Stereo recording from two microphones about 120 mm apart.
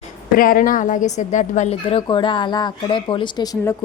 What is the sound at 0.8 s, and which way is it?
Speech, 90° left.